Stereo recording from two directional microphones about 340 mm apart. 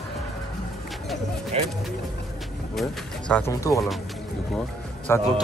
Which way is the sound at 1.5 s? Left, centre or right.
Centre.